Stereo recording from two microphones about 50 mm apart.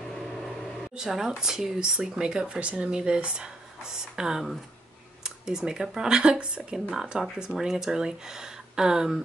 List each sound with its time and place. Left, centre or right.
0.9 s speech: centre